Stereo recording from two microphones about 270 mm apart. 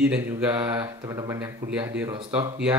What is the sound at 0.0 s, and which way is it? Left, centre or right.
Mantra, centre.